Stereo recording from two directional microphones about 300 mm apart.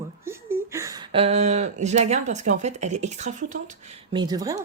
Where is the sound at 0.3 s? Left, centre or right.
Centre.